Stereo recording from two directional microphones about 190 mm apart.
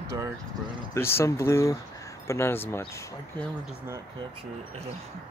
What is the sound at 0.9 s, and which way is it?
Speech, 15° left (ahead or behind).